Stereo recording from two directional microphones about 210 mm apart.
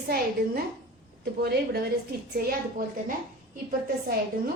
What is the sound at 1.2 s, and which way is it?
A woman's voice, 50° right (ahead or behind).